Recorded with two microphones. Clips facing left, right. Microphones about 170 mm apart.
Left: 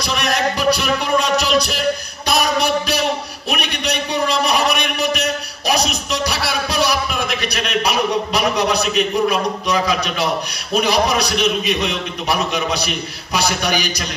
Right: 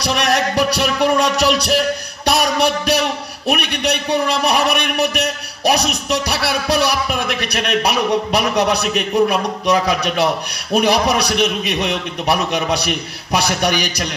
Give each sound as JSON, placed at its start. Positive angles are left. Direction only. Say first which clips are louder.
{"t": 0.0, "sound": "music", "louder": "right 2 dB", "side_deg": -70}
{"t": 2.2, "sound": "a sound", "louder": "right 2 dB", "side_deg": -65}
{"t": 3.4, "sound": "music", "louder": "right 4 dB", "side_deg": -60}